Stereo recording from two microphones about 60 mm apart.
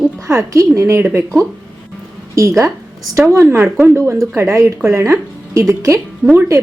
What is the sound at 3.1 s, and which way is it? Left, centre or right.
A woman's voice, right.